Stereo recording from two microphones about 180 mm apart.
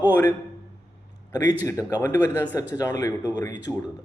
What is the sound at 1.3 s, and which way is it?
A man's voice, 20° left (ahead or behind).